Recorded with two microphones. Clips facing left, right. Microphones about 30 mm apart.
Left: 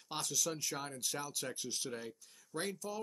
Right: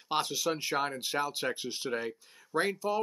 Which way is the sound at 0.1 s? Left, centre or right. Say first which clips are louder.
Right 8 dB; right.